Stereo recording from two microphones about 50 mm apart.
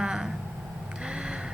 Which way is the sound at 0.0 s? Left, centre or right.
Centre.